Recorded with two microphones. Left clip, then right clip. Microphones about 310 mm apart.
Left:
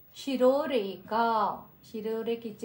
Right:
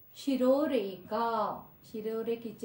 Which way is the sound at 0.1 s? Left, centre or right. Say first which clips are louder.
Even; centre.